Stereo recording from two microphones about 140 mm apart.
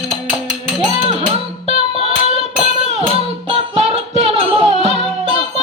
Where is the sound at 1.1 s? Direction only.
40° right (ahead or behind).